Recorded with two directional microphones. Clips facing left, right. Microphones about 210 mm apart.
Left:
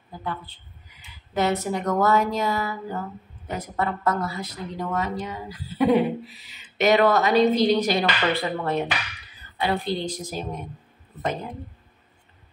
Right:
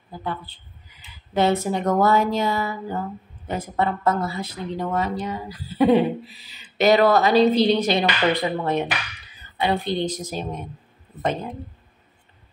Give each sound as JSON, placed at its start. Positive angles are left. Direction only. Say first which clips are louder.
{"t": 1.3, "sound": "speech", "louder": "right 3 dB", "side_deg": -30}